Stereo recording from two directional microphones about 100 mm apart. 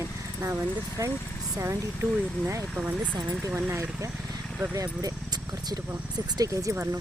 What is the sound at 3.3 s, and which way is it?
Speech, 25° right (ahead or behind).